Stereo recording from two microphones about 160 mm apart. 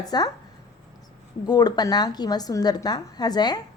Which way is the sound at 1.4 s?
25° left (ahead or behind).